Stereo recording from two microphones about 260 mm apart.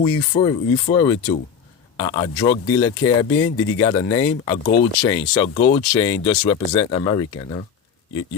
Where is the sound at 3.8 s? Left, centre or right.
Centre.